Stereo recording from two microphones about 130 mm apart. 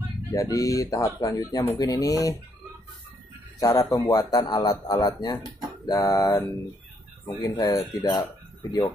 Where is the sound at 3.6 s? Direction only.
25° left (ahead or behind).